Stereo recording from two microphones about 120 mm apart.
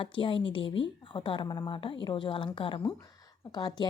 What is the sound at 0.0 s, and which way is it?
A woman's voice, 45° left (ahead or behind).